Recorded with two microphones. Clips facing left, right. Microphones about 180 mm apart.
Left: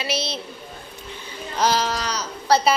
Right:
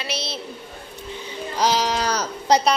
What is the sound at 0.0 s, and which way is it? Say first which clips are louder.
Speech: left 3 dB; centre (ahead or behind).